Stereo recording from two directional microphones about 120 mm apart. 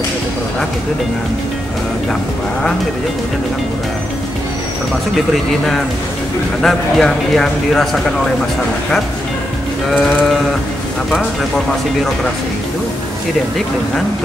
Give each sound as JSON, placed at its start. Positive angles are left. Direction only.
{"t": 6.6, "sound": "speech", "side_deg": 5}
{"t": 11.1, "sound": "speech", "side_deg": 5}